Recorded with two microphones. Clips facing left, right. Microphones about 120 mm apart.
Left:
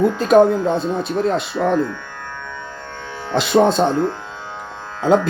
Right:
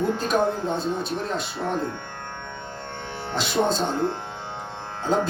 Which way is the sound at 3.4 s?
55° left (ahead or behind).